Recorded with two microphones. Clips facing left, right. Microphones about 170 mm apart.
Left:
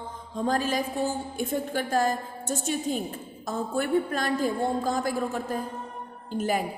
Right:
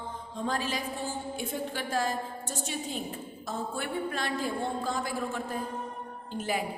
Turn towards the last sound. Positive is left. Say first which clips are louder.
# left 5 dB
turn(degrees=45)  # may be behind; listen again after turning